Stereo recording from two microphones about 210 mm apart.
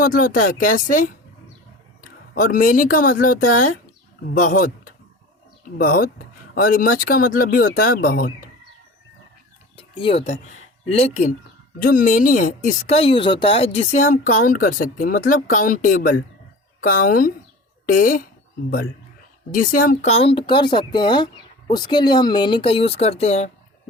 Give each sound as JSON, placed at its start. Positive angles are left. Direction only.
{"t": 0.0, "sound": "speech", "side_deg": 40}
{"t": 9.7, "sound": "speech", "side_deg": 25}
{"t": 11.8, "sound": "speech", "side_deg": 40}
{"t": 19.5, "sound": "speech", "side_deg": 40}